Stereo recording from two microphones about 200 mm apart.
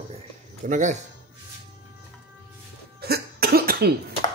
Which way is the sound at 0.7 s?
35° right (ahead or behind).